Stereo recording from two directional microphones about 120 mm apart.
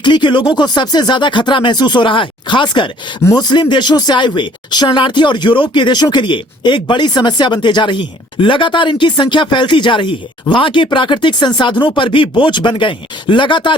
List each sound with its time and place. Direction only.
0.0 s speech: 40° left (ahead or behind)